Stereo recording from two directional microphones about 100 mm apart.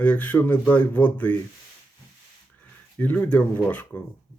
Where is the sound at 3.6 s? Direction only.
15° left (ahead or behind).